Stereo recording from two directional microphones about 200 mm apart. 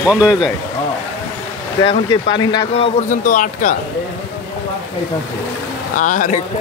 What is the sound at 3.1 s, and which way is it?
Speech, 40° left (ahead or behind).